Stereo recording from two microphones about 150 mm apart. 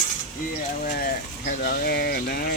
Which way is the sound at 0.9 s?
80° left.